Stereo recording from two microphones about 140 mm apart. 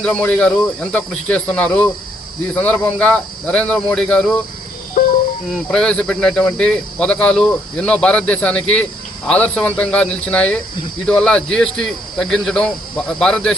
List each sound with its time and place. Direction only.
0.0 s speech: 10° left (ahead or behind)
5.5 s a man's voice: 5° left (ahead or behind)